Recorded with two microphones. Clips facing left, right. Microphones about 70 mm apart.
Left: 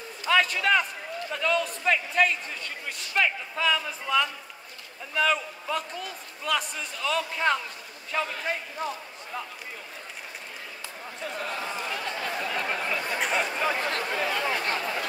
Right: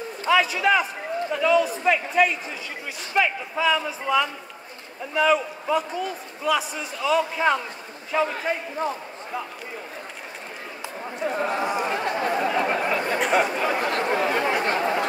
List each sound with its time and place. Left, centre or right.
0.3 s a man's voice: centre
8.8 s a man's voice: right
11.1 s speech: right
11.9 s a sound: right
13.3 s chatter: right